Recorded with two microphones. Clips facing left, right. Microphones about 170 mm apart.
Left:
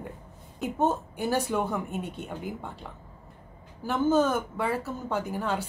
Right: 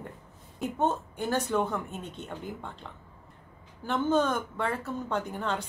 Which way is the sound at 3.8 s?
5° left (ahead or behind).